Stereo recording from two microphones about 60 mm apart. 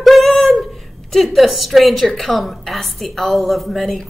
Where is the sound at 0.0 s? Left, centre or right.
Centre.